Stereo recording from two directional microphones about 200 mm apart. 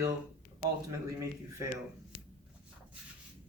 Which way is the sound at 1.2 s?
15° right (ahead or behind).